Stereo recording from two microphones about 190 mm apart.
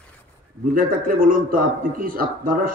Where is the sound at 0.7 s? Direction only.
50° right (ahead or behind).